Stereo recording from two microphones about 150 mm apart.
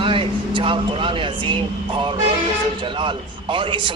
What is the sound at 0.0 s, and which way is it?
A man's voice, 35° right (ahead or behind).